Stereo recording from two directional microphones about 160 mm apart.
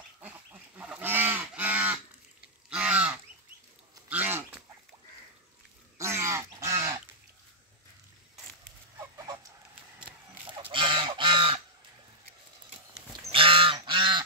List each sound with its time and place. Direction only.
0.2 s goose: 10° right (ahead or behind)
4.1 s pig: 10° right (ahead or behind)
5.9 s a sound: 15° right (ahead or behind)
10.5 s goose: 30° right (ahead or behind)
13.1 s goose: 35° right (ahead or behind)